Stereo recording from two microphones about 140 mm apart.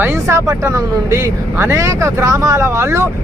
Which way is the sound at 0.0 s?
20° right (ahead or behind).